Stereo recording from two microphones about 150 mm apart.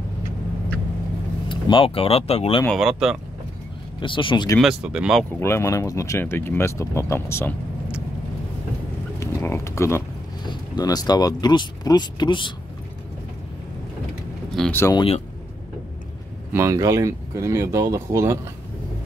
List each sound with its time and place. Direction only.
1.5 s speech: 35° left (ahead or behind)
2.6 s speech: centre (ahead or behind)
4.0 s speech: 35° left (ahead or behind)
4.6 s speech: 5° right (ahead or behind)
5.3 s speech: 15° left (ahead or behind)
9.2 s a sound: 20° left (ahead or behind)
10.4 s speech: 30° left (ahead or behind)
14.7 s speech: 15° left (ahead or behind)
15.0 s speech: 40° left (ahead or behind)
16.5 s speech: 20° right (ahead or behind)